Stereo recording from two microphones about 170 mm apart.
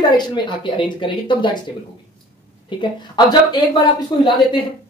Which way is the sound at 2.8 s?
25° left (ahead or behind).